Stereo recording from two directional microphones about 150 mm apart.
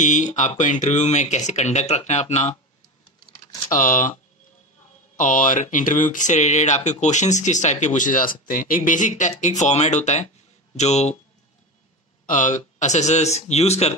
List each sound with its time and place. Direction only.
0.0 s speech: 55° left (ahead or behind)
3.7 s speech: 65° left (ahead or behind)
5.1 s speech: 60° left (ahead or behind)
12.3 s speech: 60° left (ahead or behind)